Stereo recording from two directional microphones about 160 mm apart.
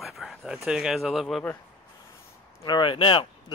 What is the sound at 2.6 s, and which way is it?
Speech, 30° left (ahead or behind).